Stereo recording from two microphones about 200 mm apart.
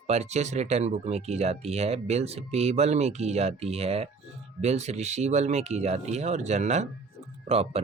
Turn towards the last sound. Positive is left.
turn(degrees=-30)  # may be behind; listen again after turning